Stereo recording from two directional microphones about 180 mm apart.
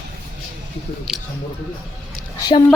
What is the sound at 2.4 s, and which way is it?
Speech, 25° left (ahead or behind).